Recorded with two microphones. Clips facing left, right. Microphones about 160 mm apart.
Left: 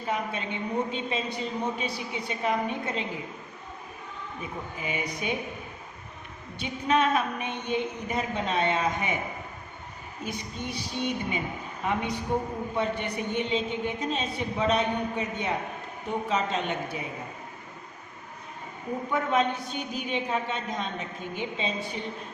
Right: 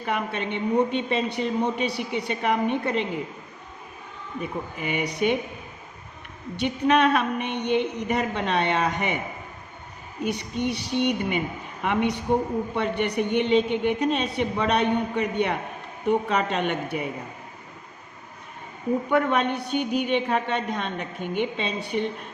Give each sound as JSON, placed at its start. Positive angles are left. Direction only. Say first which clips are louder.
{"t": 0.0, "sound": "a man's voice", "louder": "right 3 dB", "side_deg": -75}
{"t": 4.9, "sound": "a man's voice", "louder": "right 8 dB", "side_deg": -70}
{"t": 6.6, "sound": "a man's voice", "louder": "right 5 dB", "side_deg": -75}
{"t": 10.2, "sound": "a man's voice", "louder": "right 9 dB", "side_deg": -75}
{"t": 19.1, "sound": "a man's voice", "louder": "right 2 dB", "side_deg": -70}